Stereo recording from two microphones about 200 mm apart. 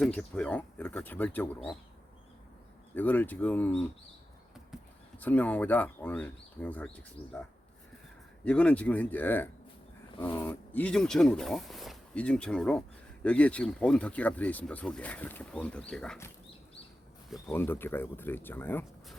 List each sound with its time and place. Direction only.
0.0 s speech: 5° left (ahead or behind)
2.9 s speech: 10° left (ahead or behind)
5.2 s speech: 10° left (ahead or behind)
7.2 s speech: 25° left (ahead or behind)
8.4 s speech: 5° left (ahead or behind)
17.5 s speech: 10° left (ahead or behind)